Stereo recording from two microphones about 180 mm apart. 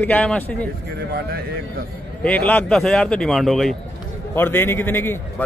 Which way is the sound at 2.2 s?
5° left (ahead or behind).